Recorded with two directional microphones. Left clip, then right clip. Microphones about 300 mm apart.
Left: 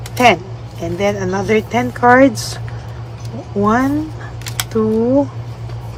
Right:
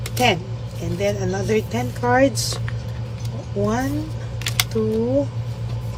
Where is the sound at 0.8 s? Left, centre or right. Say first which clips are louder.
Left 6 dB; centre.